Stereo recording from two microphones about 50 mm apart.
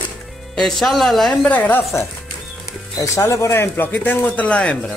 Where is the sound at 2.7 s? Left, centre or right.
Left.